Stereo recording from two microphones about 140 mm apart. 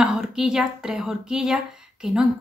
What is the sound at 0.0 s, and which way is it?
Speech, 5° right (ahead or behind).